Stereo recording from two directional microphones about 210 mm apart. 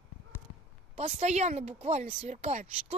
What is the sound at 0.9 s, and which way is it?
Speech, 30° right (ahead or behind).